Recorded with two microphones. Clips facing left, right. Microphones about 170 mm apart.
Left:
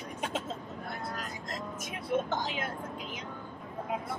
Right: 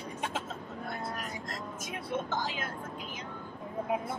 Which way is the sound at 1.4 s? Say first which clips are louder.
Left 1 dB; 20° left (ahead or behind).